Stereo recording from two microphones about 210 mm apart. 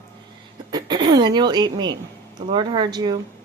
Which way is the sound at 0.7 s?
20° right (ahead or behind).